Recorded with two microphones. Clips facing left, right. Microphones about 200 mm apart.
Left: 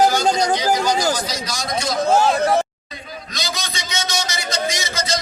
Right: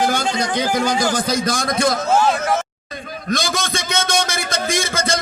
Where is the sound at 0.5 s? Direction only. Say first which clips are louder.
Even; 55° right (ahead or behind).